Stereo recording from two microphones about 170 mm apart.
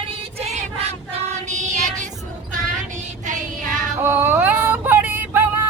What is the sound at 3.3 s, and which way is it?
Child singing, 50° right (ahead or behind).